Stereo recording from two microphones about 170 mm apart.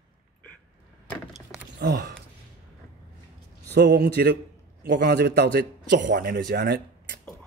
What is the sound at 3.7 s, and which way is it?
A man's voice, 90° right.